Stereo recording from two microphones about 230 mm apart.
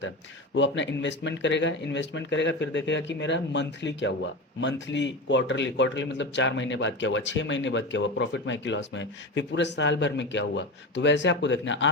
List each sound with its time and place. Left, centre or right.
0.5 s speech: left